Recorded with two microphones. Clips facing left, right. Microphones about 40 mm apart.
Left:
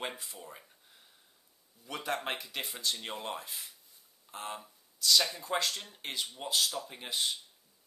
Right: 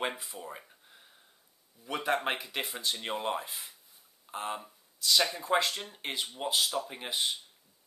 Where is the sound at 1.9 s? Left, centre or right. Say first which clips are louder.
Right 5 dB; centre.